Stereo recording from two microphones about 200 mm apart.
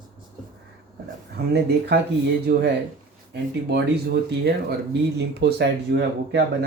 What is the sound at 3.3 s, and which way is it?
Speech, 55° right (ahead or behind).